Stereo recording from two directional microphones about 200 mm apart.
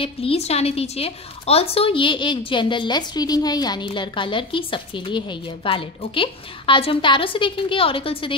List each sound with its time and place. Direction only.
0.0 s a woman's voice: 30° left (ahead or behind)